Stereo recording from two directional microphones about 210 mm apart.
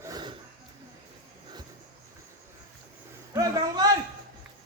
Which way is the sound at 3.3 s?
15° right (ahead or behind).